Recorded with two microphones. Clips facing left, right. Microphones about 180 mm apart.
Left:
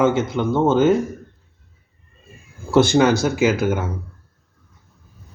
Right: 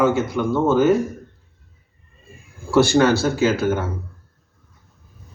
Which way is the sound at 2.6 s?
20° left (ahead or behind).